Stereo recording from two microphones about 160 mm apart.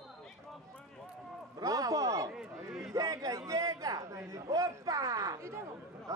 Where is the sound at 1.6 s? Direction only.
20° right (ahead or behind).